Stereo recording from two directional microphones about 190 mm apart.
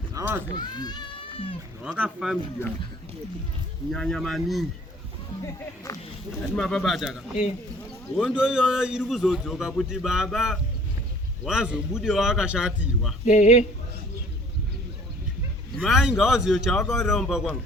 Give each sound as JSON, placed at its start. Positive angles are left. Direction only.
{"t": 0.1, "sound": "a sound", "side_deg": -15}
{"t": 0.5, "sound": "speech", "side_deg": 20}
{"t": 1.8, "sound": "speech", "side_deg": 0}
{"t": 3.9, "sound": "speech", "side_deg": 0}
{"t": 5.4, "sound": "speech", "side_deg": 15}
{"t": 6.6, "sound": "speech", "side_deg": 0}
{"t": 8.3, "sound": "speech", "side_deg": -5}
{"t": 13.2, "sound": "speech", "side_deg": 40}
{"t": 15.8, "sound": "speech", "side_deg": 0}